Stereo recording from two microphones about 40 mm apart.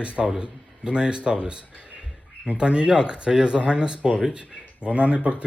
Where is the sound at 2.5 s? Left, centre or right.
Right.